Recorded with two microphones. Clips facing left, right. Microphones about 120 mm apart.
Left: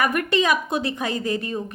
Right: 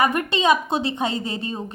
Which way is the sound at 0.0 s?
25° right (ahead or behind).